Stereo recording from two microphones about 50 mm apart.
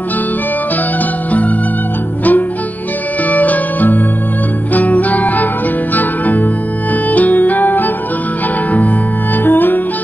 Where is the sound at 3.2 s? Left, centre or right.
Left.